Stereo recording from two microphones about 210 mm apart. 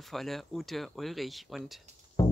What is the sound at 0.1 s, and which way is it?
Speech, centre (ahead or behind).